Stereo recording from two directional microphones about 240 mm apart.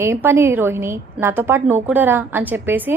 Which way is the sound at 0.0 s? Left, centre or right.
Centre.